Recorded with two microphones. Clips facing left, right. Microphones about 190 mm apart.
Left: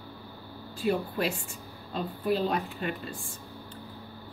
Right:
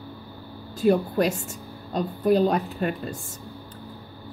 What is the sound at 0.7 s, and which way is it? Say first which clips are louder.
A woman's voice: right 8 dB; 45° right (ahead or behind).